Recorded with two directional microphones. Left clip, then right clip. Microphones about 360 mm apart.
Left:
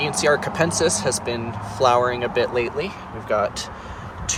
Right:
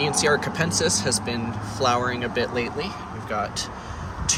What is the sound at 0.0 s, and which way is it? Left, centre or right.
Speech, centre.